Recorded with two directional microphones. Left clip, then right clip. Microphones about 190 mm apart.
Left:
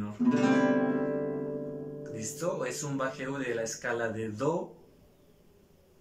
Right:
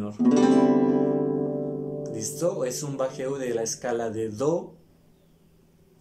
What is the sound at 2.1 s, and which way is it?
Speech, 20° right (ahead or behind).